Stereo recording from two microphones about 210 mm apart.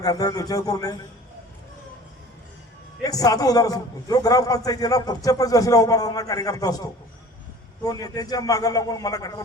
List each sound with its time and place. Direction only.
0.0 s a man's voice: 20° left (ahead or behind)
3.0 s a man's voice: 15° left (ahead or behind)